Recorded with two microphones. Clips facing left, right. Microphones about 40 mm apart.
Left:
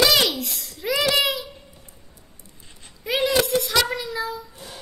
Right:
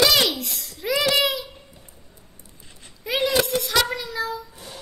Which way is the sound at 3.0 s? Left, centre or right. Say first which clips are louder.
Left 1 dB; centre.